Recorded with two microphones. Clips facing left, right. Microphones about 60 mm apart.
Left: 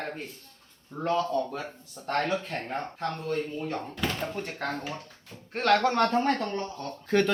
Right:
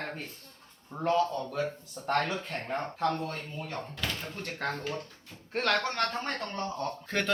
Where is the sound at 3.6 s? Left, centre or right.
Centre.